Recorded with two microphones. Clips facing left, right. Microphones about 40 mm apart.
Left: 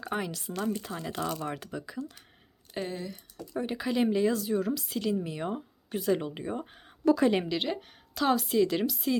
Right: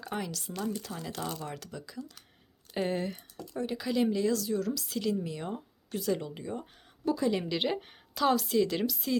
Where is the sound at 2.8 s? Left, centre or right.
Right.